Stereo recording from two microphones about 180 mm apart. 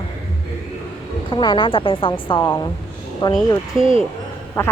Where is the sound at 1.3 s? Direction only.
25° left (ahead or behind).